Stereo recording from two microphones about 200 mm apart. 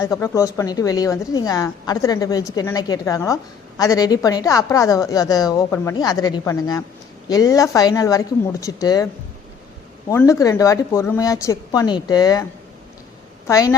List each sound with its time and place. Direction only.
0.0 s a woman's voice: 15° left (ahead or behind)
10.1 s a woman's voice: 15° left (ahead or behind)
13.5 s a woman's voice: 15° left (ahead or behind)